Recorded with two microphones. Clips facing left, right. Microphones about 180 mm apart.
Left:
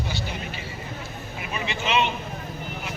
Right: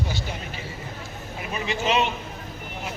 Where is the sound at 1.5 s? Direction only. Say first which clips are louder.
Right 1 dB; 40° right (ahead or behind).